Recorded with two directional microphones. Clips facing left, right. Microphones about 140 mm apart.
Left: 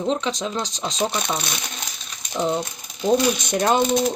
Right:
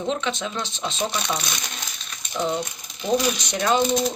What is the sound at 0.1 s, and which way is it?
Speech, 35° left (ahead or behind).